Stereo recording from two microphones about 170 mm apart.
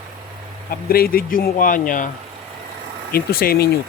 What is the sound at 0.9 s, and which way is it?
Speech, 60° left (ahead or behind).